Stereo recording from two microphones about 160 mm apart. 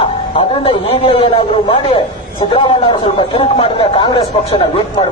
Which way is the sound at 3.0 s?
35° left (ahead or behind).